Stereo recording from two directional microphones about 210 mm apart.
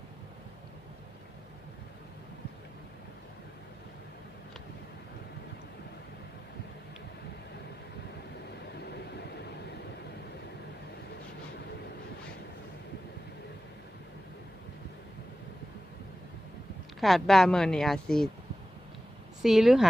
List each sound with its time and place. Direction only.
8.9 s vehicle: 50° left (ahead or behind)
17.0 s speech: centre (ahead or behind)
19.4 s speech: centre (ahead or behind)